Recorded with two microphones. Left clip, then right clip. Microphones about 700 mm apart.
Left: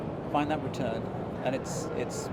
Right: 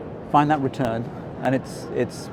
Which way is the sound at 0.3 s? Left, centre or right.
Right.